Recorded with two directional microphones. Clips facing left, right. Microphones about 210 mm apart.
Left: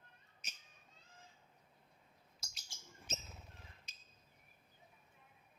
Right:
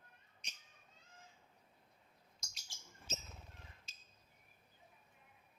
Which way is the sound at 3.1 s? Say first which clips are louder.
Even; 15° left (ahead or behind).